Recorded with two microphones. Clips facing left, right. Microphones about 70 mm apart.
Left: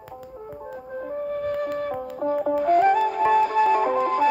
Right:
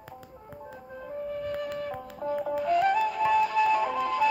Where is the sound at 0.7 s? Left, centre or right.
Left.